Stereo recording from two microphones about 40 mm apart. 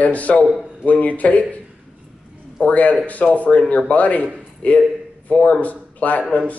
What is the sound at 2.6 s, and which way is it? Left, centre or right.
A man's voice, left.